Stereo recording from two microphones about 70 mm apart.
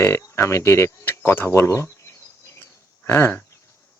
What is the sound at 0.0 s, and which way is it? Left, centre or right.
Speech, left.